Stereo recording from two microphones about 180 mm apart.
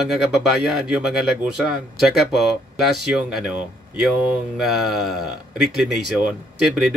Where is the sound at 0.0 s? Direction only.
Centre (ahead or behind).